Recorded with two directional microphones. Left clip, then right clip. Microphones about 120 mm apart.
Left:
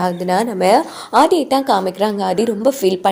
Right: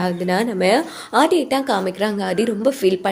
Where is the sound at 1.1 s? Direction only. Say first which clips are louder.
Left 4 dB; 30° left (ahead or behind).